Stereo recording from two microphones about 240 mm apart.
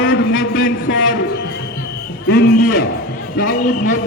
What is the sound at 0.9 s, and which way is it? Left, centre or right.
Speech, left.